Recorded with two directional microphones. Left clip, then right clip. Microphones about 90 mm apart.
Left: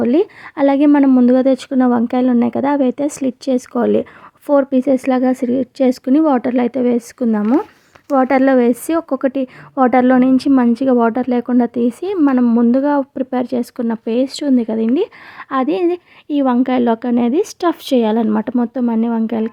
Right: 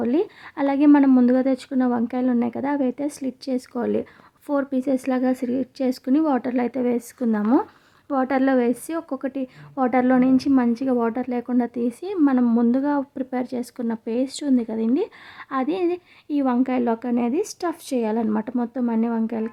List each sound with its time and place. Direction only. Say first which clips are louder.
0.0 s speech: left 8 dB; 45° left (ahead or behind)
0.9 s speech: left 5 dB; 30° left (ahead or behind)
12.1 s a woman's voice: left 5 dB; 25° left (ahead or behind)
12.7 s speech: left 8 dB; 40° left (ahead or behind)